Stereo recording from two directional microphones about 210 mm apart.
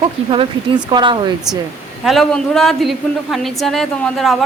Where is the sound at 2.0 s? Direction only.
Centre (ahead or behind).